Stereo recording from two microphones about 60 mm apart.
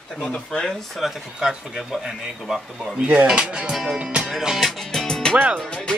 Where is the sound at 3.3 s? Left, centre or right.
Centre.